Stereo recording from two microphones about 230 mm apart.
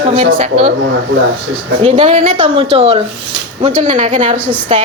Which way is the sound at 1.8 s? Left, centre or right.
Right.